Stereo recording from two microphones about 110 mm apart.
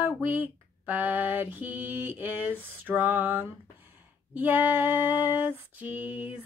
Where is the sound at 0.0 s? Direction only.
15° right (ahead or behind).